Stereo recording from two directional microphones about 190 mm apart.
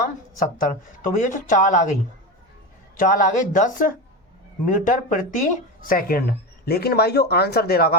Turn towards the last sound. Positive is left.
turn(degrees=55)  # may be behind; listen again after turning